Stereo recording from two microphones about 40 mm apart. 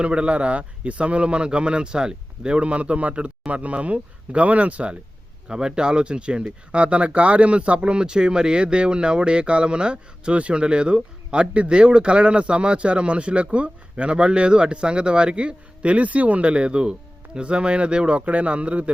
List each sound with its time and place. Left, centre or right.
0.0 s speech: right
5.5 s speech: right